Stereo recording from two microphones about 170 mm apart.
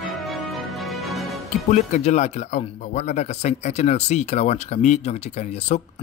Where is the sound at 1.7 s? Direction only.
45° left (ahead or behind).